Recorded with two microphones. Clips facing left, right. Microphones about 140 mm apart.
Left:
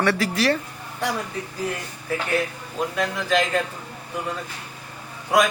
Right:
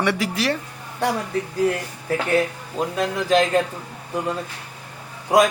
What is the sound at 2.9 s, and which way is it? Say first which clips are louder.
Speech: right 4 dB; 30° right (ahead or behind).